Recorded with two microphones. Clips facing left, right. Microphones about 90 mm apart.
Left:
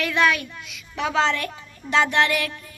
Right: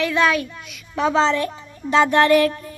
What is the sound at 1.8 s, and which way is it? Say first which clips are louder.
Child singing: right 5 dB; 40° right (ahead or behind).